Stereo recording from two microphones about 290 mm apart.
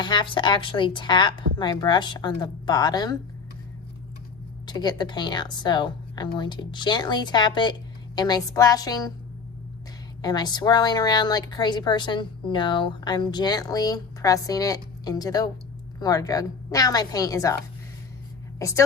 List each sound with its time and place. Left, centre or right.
0.0 s a woman's voice: centre
4.6 s a woman's voice: centre
10.2 s a woman's voice: centre